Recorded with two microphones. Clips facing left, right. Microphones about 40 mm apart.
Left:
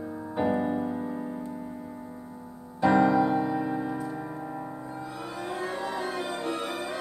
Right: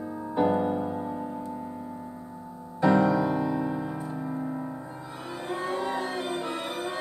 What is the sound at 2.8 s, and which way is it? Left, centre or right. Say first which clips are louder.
Music: left 1 dB; left.